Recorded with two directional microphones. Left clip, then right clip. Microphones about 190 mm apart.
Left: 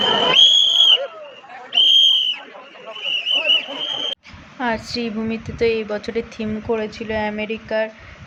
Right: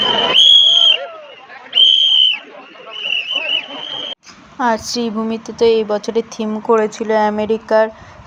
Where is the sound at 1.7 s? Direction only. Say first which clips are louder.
Right 2 dB; 25° left (ahead or behind).